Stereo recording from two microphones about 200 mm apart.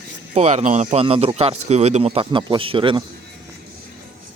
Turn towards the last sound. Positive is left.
turn(degrees=-25)  # may be behind; listen again after turning